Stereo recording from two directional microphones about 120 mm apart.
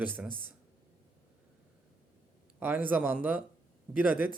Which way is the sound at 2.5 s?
15° right (ahead or behind).